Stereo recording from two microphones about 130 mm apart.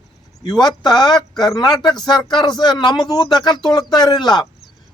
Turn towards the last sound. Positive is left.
turn(degrees=35)  # may be behind; listen again after turning